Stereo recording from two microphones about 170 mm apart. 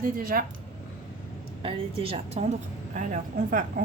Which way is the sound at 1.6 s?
35° right (ahead or behind).